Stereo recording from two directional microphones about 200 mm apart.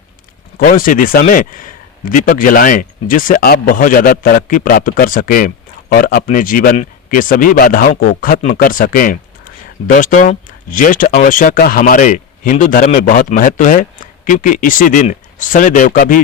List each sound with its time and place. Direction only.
0.6 s speech: 45° left (ahead or behind)